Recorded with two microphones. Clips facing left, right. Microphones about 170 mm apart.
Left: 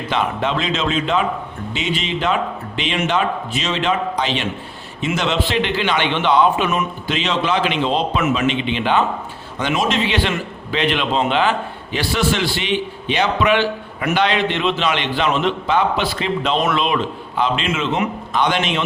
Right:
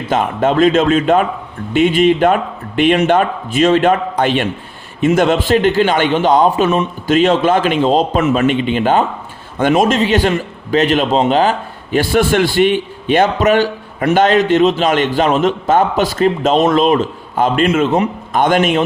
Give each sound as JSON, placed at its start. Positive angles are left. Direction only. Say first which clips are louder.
{"t": 0.1, "sound": "a man's voice", "louder": "right 6 dB", "side_deg": -45}
{"t": 7.1, "sound": "a man's voice", "louder": "right 9 dB", "side_deg": -50}